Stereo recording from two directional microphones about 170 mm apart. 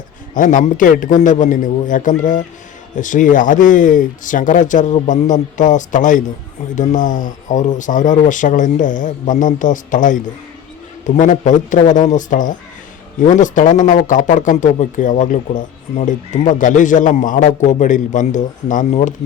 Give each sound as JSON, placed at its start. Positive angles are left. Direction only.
{"t": 0.3, "sound": "a man's voice", "side_deg": 50}